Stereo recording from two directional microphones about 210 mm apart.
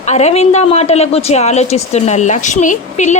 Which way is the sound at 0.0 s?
35° left (ahead or behind).